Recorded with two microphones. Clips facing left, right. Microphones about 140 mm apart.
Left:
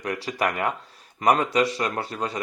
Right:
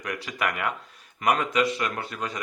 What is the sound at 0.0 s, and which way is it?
Speech, 35° left (ahead or behind).